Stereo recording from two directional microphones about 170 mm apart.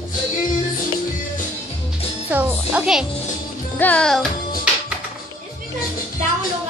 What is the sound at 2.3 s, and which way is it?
Speech, 10° right (ahead or behind).